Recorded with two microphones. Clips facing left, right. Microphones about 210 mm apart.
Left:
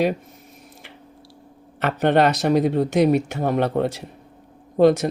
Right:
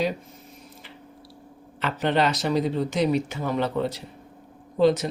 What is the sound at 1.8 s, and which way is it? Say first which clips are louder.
A man's voice: left 6 dB; 60° left (ahead or behind).